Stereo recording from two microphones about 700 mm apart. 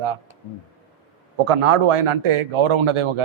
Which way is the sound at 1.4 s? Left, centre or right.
Right.